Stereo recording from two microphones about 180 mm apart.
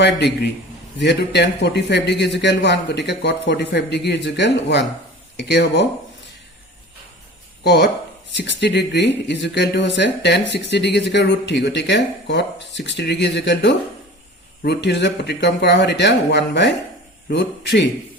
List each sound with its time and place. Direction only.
0.9 s speech: 70° left (ahead or behind)
7.6 s speech: 70° left (ahead or behind)
8.3 s speech: 80° left